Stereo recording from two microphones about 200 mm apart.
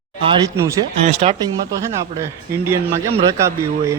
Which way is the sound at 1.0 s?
30° right (ahead or behind).